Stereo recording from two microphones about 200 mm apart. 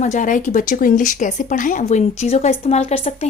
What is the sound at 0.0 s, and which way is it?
A woman's voice, 40° left (ahead or behind).